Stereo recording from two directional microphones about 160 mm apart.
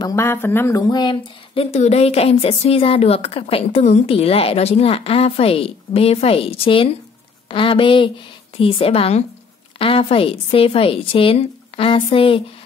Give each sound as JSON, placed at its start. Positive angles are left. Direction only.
{"t": 0.0, "sound": "speech", "side_deg": 20}